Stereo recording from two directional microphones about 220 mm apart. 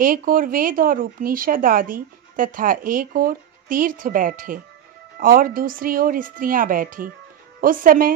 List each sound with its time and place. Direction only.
0.0 s speech: 40° right (ahead or behind)